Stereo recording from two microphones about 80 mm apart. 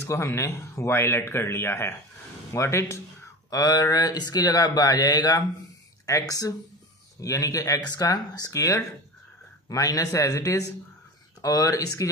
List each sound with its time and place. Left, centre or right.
0.0 s speech: left
3.4 s speech: left
7.9 s speech: left
8.5 s speech: left
9.7 s speech: left